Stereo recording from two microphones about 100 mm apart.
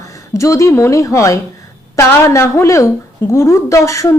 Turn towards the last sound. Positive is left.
turn(degrees=30)  # may be behind; listen again after turning